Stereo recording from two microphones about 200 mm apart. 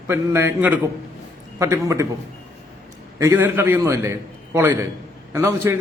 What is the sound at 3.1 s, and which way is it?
Speech, 10° right (ahead or behind).